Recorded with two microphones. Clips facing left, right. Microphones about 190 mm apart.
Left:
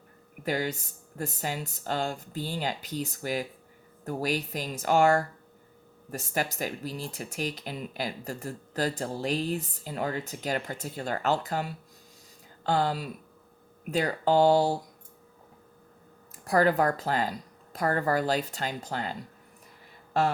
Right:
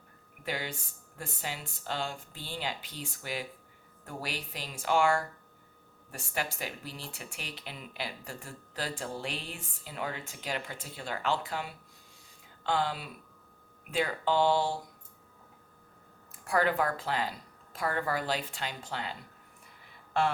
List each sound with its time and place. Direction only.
0.4 s speech: 40° left (ahead or behind)
16.4 s speech: 40° left (ahead or behind)